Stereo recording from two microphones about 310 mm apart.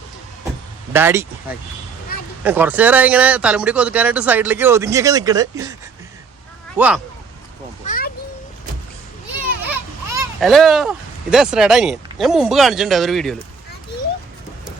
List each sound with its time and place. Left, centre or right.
0.9 s speech: centre
2.4 s speech: centre
6.7 s speech: centre
7.9 s a sound: left
9.6 s a sound: centre
10.5 s speech: centre